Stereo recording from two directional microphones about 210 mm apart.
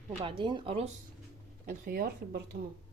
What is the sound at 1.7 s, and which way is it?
Speech, 40° right (ahead or behind).